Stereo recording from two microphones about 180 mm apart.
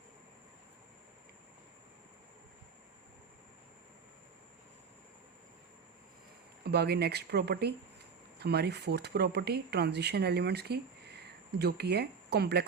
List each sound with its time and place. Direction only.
6.7 s speech: 65° right (ahead or behind)